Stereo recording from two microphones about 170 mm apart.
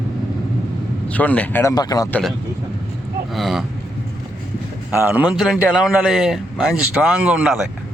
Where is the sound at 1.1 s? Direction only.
10° left (ahead or behind).